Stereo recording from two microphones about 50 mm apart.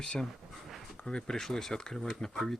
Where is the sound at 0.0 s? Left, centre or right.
Centre.